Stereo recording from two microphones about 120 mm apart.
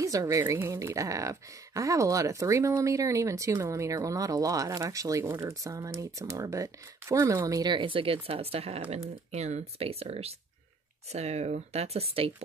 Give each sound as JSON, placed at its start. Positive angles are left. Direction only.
{"t": 0.0, "sound": "a woman's voice", "side_deg": -30}